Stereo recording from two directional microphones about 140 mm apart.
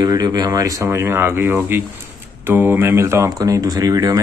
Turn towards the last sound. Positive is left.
turn(degrees=-25)  # may be behind; listen again after turning